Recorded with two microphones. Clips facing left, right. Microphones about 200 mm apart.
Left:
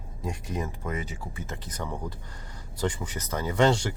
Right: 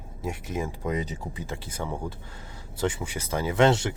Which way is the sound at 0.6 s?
15° right (ahead or behind).